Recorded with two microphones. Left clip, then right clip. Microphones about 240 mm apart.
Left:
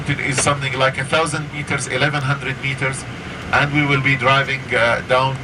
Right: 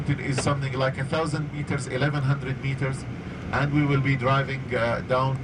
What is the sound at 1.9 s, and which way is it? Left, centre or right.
Speech, centre.